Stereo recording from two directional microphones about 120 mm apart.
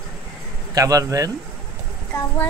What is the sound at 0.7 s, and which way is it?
Speech, 30° right (ahead or behind).